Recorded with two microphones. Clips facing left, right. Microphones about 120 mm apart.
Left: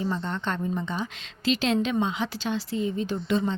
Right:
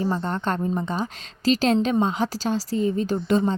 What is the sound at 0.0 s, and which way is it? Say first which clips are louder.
A woman's voice: right 4 dB; 40° right (ahead or behind).